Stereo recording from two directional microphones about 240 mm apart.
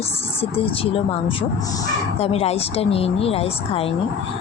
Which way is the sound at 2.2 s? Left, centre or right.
Left.